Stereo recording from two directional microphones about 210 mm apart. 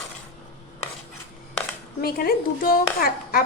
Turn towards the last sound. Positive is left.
turn(degrees=45)  # may be behind; listen again after turning